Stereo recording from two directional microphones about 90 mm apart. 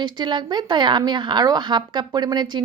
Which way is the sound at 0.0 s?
55° right (ahead or behind).